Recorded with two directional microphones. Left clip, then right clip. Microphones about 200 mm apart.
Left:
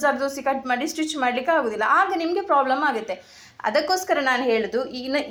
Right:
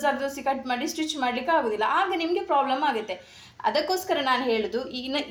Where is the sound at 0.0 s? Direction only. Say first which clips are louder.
Left 4 dB; 20° left (ahead or behind).